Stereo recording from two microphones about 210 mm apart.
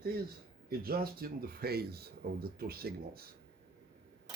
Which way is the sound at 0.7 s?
45° right (ahead or behind).